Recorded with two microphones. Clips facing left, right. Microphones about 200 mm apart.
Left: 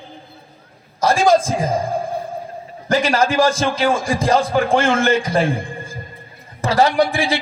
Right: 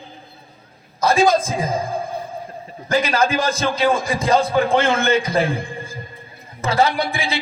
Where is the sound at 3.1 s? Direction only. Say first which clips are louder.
Left 3 dB; 80° left.